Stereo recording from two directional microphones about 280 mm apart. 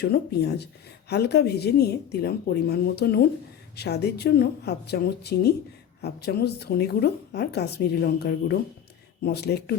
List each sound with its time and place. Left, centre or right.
0.0 s a woman's voice: left